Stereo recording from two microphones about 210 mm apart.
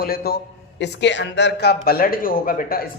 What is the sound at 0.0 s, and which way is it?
Speech, 45° left (ahead or behind).